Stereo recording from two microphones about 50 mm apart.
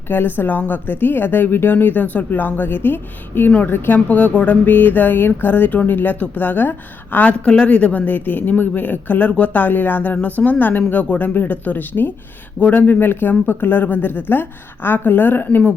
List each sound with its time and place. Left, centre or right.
0.1 s speech: left
3.9 s speech: left
7.3 s speech: left